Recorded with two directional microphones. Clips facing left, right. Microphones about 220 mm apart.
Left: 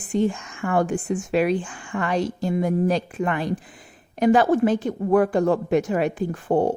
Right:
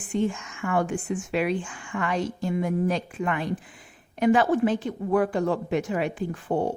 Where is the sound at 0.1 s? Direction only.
35° left (ahead or behind).